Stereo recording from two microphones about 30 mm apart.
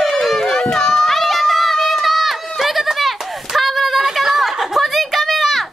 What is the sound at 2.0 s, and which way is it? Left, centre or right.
Run, centre.